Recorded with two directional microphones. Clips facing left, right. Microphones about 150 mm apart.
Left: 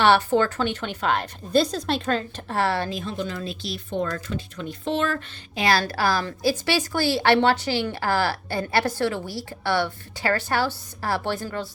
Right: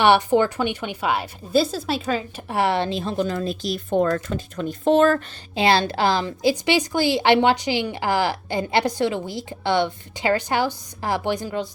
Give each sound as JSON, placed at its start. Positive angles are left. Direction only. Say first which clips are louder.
{"t": 0.0, "sound": "a woman's voice", "louder": "right 2 dB", "side_deg": -15}
{"t": 5.5, "sound": "a woman's voice", "louder": "right 3 dB", "side_deg": -25}